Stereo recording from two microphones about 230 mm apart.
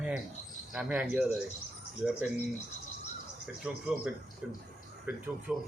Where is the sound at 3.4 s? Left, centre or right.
Centre.